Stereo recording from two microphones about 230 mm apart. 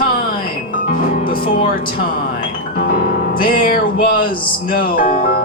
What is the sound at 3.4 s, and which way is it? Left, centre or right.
Music, left.